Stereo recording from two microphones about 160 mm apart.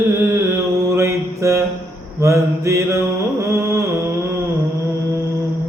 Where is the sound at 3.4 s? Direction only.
20° right (ahead or behind).